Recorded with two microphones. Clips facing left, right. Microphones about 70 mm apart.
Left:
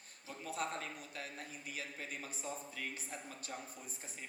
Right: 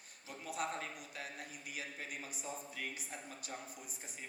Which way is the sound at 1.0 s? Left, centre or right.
Left.